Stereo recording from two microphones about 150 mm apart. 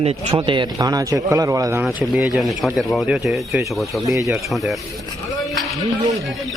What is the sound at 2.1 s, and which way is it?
Speech, 5° right (ahead or behind).